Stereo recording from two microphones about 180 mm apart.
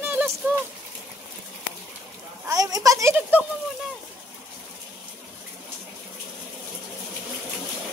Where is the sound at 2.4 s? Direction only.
20° right (ahead or behind).